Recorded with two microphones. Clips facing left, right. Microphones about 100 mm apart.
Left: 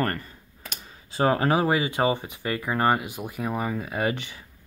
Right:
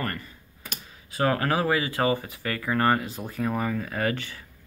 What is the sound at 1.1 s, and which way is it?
Speech, 25° left (ahead or behind).